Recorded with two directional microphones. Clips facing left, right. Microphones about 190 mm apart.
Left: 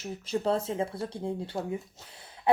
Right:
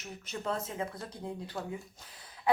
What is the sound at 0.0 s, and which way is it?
Speech, 30° left (ahead or behind).